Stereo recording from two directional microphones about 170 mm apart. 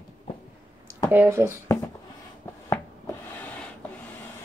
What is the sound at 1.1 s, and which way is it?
Speech, 15° right (ahead or behind).